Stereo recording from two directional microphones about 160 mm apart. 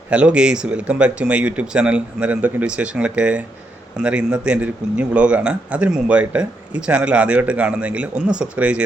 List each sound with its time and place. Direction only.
0.1 s a man's voice: 5° right (ahead or behind)